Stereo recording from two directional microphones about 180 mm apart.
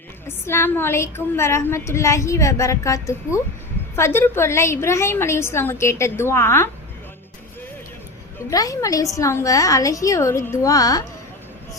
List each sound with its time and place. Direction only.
0.3 s a woman's voice: 15° left (ahead or behind)
8.4 s a woman's voice: 20° left (ahead or behind)